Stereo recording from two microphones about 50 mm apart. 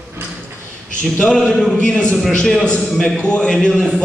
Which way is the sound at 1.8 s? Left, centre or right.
Centre.